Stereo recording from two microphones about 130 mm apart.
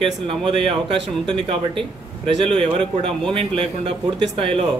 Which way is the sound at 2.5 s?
45° right (ahead or behind).